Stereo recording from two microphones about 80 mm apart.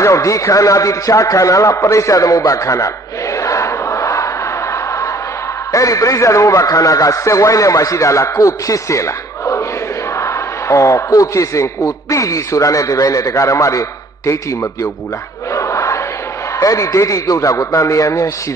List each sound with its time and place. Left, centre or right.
0.0 s a man's voice: left
3.4 s battle cry: left
5.7 s a man's voice: left
15.5 s crowd: left
16.5 s a man's voice: left